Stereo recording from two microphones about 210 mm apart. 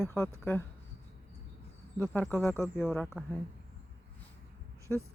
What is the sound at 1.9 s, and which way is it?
Speech, 10° left (ahead or behind).